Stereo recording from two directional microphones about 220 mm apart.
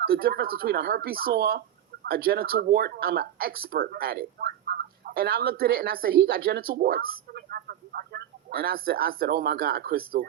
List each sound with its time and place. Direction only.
0.0 s speech: 45° right (ahead or behind)